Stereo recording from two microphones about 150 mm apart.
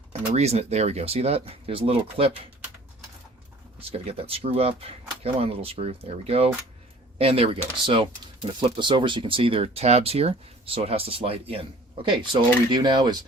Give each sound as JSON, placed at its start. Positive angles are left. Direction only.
{"t": 0.1, "sound": "speech", "side_deg": -45}
{"t": 3.8, "sound": "speech", "side_deg": -40}